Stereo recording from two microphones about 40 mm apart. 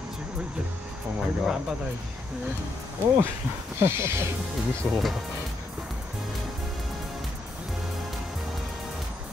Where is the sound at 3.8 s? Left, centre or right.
Right.